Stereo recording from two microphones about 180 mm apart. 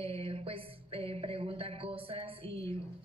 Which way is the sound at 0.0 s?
35° right (ahead or behind).